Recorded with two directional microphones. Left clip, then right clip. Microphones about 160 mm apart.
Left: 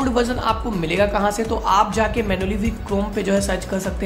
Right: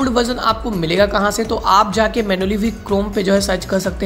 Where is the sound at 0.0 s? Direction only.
20° right (ahead or behind).